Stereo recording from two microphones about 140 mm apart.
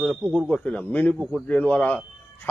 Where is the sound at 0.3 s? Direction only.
5° left (ahead or behind).